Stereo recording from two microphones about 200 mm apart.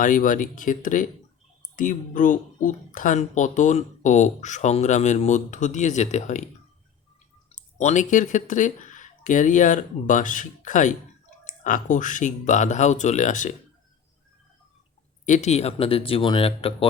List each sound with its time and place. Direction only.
0.0 s speech: 40° left (ahead or behind)
7.5 s speech: 35° left (ahead or behind)
15.3 s speech: 35° left (ahead or behind)